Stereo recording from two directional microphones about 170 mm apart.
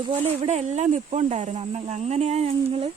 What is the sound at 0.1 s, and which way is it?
Speech, 40° right (ahead or behind).